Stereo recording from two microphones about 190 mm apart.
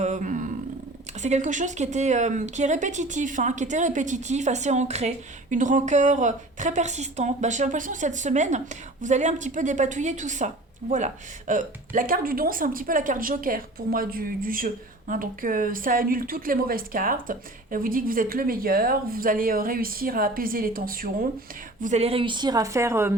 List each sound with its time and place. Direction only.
0.0 s wild animals: 40° right (ahead or behind)
1.2 s speech: 40° right (ahead or behind)
21.8 s a woman's voice: 40° right (ahead or behind); by 23.1 s 15° right (ahead or behind)